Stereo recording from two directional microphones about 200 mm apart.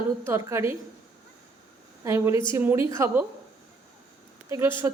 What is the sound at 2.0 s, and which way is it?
A woman's voice, 15° right (ahead or behind).